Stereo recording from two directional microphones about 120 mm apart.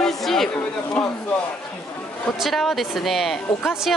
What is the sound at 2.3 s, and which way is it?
Speech, centre (ahead or behind).